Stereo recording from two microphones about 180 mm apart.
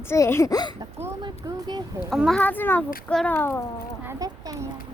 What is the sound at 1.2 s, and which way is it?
Speech, 25° right (ahead or behind).